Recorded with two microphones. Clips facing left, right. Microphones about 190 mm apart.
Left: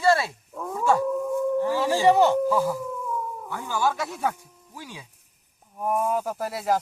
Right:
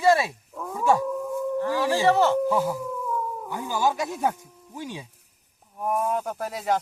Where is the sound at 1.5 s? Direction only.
15° left (ahead or behind).